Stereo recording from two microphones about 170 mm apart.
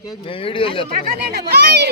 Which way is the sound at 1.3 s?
70° right (ahead or behind).